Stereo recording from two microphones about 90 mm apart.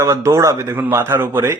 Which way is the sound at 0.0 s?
35° right (ahead or behind).